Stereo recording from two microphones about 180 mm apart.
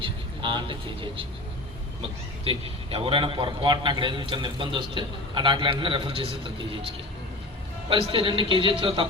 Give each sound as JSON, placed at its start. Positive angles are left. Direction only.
{"t": 0.0, "sound": "a man's voice", "side_deg": -25}